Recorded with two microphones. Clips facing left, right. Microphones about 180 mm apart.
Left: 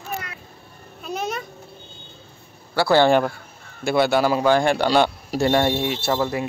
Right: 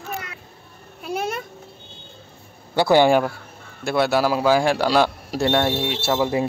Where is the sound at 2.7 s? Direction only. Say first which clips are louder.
Right 1 dB; 15° right (ahead or behind).